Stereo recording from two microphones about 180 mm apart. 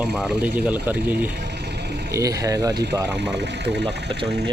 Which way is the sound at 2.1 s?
20° right (ahead or behind).